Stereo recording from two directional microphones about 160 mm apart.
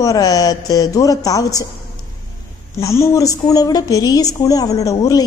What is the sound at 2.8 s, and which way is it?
A woman's voice, 20° left (ahead or behind).